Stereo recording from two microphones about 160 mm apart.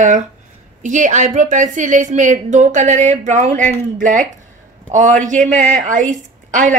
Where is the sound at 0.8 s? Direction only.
50° right (ahead or behind).